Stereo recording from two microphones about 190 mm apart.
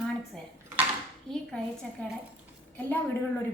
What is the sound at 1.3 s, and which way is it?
A woman's voice, 5° left (ahead or behind).